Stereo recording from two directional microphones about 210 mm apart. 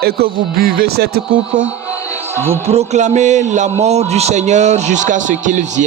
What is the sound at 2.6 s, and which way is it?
A man's voice, 30° right (ahead or behind).